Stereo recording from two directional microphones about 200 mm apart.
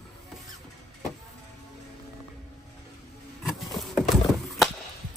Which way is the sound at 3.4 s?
Centre (ahead or behind).